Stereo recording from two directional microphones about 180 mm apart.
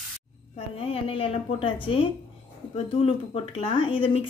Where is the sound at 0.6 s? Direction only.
35° left (ahead or behind).